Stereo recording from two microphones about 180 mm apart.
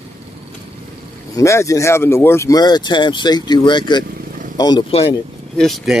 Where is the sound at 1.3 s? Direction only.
15° left (ahead or behind).